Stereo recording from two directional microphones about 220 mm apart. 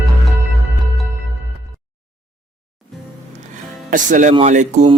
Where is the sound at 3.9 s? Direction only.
35° right (ahead or behind).